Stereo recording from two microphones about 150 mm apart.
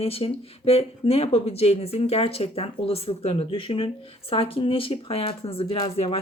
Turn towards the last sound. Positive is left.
turn(degrees=40)  # may be behind; listen again after turning